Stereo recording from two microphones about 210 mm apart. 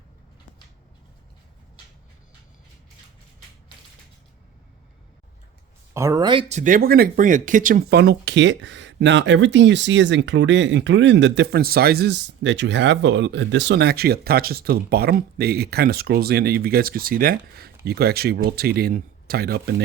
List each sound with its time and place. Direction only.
5.9 s speech: 15° right (ahead or behind)
6.5 s speech: 35° right (ahead or behind)